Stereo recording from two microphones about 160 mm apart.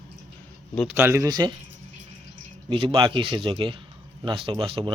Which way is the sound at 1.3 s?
25° right (ahead or behind).